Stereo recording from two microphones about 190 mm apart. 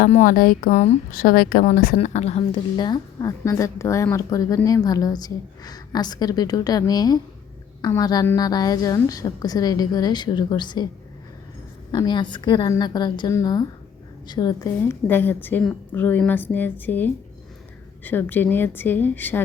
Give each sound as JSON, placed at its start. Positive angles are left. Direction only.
{"t": 0.1, "sound": "a woman's voice", "side_deg": 45}
{"t": 2.0, "sound": "speech", "side_deg": 35}
{"t": 2.7, "sound": "a woman's voice", "side_deg": 20}
{"t": 11.9, "sound": "a woman's voice", "side_deg": 20}